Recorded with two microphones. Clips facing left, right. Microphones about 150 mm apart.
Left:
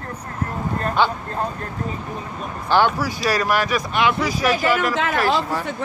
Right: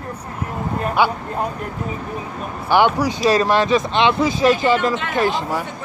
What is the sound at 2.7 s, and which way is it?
Speech, 20° right (ahead or behind).